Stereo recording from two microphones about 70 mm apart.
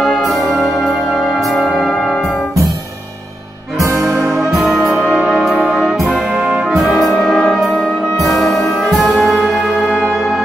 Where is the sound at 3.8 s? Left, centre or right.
Right.